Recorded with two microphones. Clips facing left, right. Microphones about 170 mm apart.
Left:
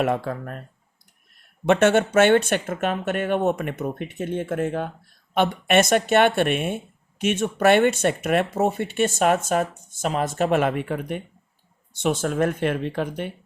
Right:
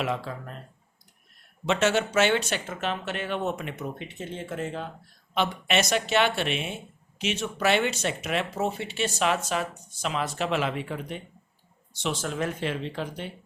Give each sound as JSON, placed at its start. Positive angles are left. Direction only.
{"t": 0.0, "sound": "speech", "side_deg": 55}
{"t": 1.6, "sound": "speech", "side_deg": 55}